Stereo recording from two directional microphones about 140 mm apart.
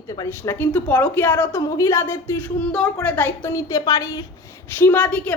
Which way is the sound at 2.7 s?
5° left (ahead or behind).